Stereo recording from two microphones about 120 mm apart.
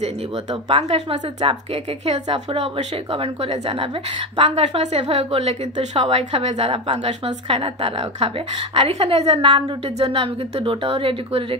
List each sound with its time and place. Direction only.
0.7 s speech: 65° right (ahead or behind)
3.7 s a woman's voice: 45° right (ahead or behind)
6.5 s a woman's voice: 45° right (ahead or behind)
6.9 s speech: 65° right (ahead or behind)
7.4 s a woman's voice: 50° right (ahead or behind)